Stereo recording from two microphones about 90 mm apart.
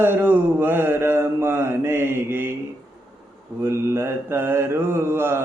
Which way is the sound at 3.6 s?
30° right (ahead or behind).